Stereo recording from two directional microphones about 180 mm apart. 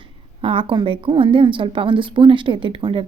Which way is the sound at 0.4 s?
30° right (ahead or behind).